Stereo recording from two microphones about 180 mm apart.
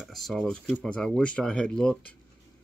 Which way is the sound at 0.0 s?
Centre (ahead or behind).